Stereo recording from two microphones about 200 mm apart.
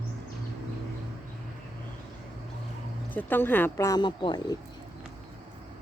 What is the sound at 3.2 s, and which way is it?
Speech, 10° left (ahead or behind).